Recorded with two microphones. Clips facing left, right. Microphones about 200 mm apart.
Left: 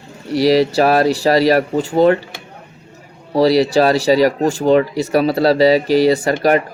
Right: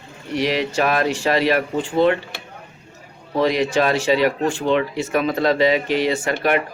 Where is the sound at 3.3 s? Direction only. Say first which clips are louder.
Left 6 dB; 35° left (ahead or behind).